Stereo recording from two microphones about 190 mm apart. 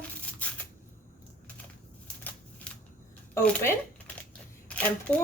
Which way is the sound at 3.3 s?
15° left (ahead or behind).